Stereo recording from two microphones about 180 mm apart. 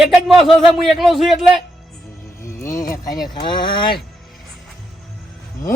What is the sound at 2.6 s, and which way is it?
A man's voice, 15° left (ahead or behind).